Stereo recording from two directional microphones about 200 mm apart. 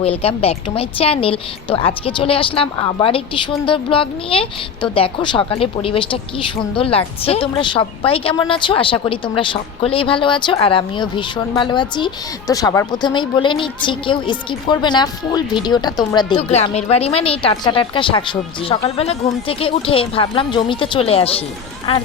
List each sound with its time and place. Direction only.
0.2 s a woman's voice: 30° left (ahead or behind)
16.4 s a woman's voice: 30° left (ahead or behind)